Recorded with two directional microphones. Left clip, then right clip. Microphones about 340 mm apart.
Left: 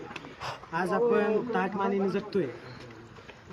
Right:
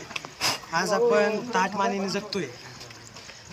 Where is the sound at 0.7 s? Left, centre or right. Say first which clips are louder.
Right 3 dB; centre.